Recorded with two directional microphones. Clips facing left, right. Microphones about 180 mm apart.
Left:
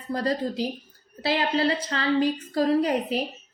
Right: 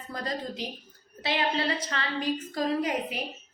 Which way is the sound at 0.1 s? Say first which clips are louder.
Left 8 dB; 35° left (ahead or behind).